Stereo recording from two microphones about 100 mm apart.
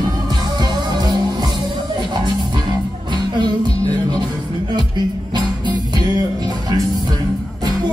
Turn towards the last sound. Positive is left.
turn(degrees=-45)  # may be behind; listen again after turning